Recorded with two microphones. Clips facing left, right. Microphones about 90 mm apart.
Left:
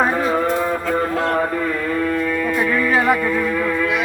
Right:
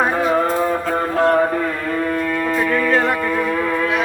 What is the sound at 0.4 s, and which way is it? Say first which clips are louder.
Music: right 1 dB; 30° right (ahead or behind).